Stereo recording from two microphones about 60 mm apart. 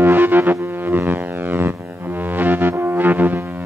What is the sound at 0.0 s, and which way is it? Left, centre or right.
Music, right.